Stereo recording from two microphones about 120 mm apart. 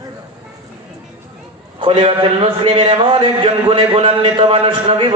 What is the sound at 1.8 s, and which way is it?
A man's voice, 50° right (ahead or behind).